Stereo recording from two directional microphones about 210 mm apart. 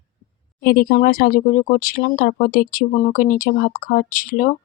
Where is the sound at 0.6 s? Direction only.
45° left (ahead or behind).